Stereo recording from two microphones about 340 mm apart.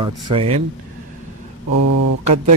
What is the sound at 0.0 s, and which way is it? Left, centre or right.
Speech, centre.